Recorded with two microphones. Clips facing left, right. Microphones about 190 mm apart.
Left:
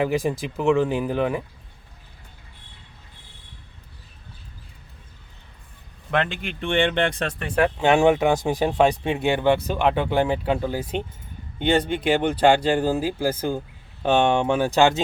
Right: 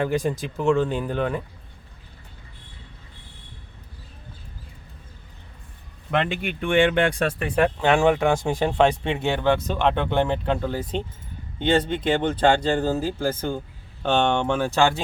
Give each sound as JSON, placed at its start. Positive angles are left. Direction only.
{"t": 0.0, "sound": "speech", "side_deg": 5}
{"t": 6.1, "sound": "speech", "side_deg": -5}
{"t": 7.8, "sound": "speech", "side_deg": 15}